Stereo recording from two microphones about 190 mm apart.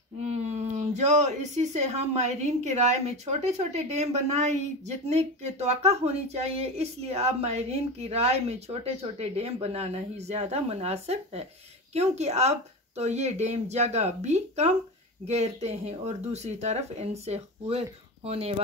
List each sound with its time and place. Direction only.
0.2 s speech: 35° right (ahead or behind)